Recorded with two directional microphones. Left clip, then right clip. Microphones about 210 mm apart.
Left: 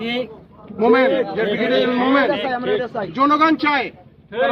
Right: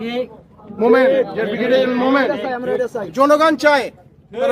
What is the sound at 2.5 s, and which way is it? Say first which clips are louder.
Speech: right 1 dB; 25° left (ahead or behind).